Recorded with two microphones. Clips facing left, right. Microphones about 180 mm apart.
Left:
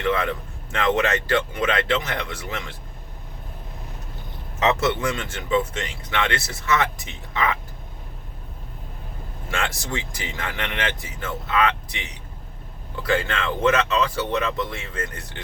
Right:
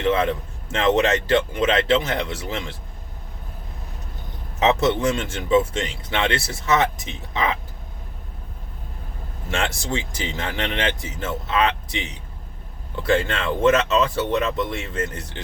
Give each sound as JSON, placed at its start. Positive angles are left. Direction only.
{"t": 0.0, "sound": "a man's voice", "side_deg": -20}
{"t": 4.6, "sound": "speech", "side_deg": -25}
{"t": 6.1, "sound": "speech", "side_deg": -25}
{"t": 9.5, "sound": "speech", "side_deg": -25}